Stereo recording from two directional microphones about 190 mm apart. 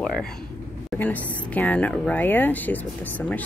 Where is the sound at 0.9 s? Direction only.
10° left (ahead or behind).